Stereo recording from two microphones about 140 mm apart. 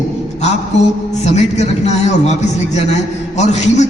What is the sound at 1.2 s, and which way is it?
A man's voice, 55° left (ahead or behind).